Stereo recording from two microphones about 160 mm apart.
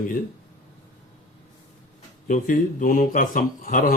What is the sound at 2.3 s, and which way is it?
A man's voice, 55° left (ahead or behind).